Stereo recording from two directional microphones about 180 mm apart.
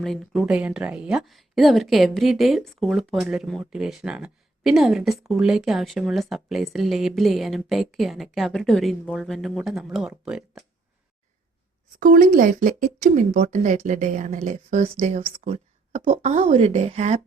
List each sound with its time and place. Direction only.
0.0 s speech: centre (ahead or behind)
11.9 s speech: 50° right (ahead or behind)